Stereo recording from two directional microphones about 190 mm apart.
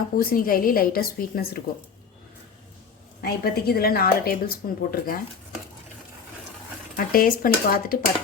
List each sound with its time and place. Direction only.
0.2 s a woman's voice: 50° left (ahead or behind)
3.2 s a woman's voice: 55° left (ahead or behind)
6.9 s a woman's voice: 50° left (ahead or behind)